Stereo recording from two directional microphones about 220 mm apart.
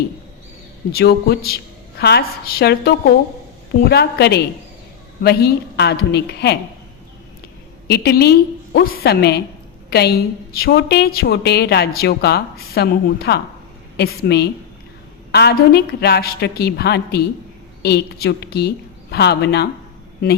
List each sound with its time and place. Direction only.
0.9 s a woman's voice: 45° left (ahead or behind)
7.9 s a woman's voice: 45° left (ahead or behind)